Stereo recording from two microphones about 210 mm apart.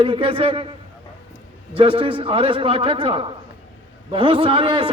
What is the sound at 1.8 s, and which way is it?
A man's voice, 25° right (ahead or behind).